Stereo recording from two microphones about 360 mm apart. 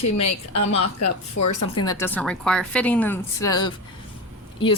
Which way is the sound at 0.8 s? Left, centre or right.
Left.